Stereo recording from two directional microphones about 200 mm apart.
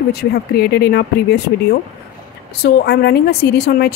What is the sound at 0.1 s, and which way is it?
Speech, 50° left (ahead or behind).